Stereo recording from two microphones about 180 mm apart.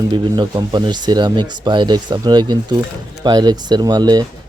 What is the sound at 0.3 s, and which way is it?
Speech, 25° right (ahead or behind).